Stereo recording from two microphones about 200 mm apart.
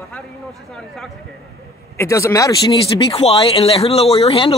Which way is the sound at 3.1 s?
30° left (ahead or behind).